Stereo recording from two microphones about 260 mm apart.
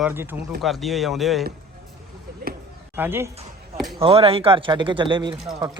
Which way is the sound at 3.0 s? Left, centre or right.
Centre.